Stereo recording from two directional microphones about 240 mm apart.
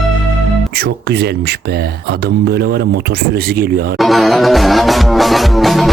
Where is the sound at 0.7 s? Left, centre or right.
Right.